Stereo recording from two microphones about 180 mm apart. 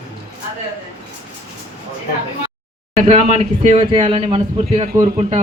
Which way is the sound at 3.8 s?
25° right (ahead or behind).